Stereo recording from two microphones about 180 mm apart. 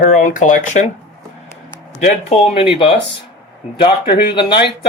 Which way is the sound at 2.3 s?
30° left (ahead or behind).